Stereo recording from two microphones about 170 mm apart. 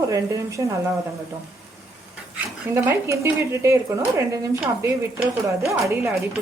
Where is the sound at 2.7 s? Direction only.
15° right (ahead or behind).